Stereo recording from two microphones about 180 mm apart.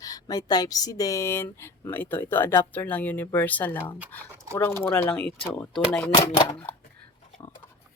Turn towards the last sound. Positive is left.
turn(degrees=25)  # may be behind; listen again after turning